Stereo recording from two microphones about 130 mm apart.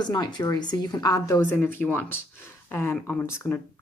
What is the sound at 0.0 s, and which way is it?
Speech, 30° left (ahead or behind).